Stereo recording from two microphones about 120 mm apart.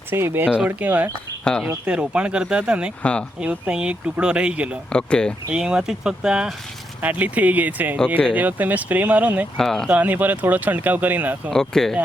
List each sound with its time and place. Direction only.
0.1 s speech: 20° right (ahead or behind)
0.4 s speech: 10° right (ahead or behind)
3.0 s speech: 10° left (ahead or behind)
3.4 s speech: 10° right (ahead or behind)
4.9 s speech: 10° left (ahead or behind)
5.5 s speech: 5° right (ahead or behind)
9.6 s speech: 5° left (ahead or behind)
9.9 s speech: 15° right (ahead or behind)
11.5 s speech: 5° left (ahead or behind)